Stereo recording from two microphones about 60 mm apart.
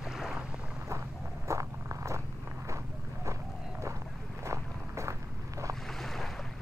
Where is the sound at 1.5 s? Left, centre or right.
Right.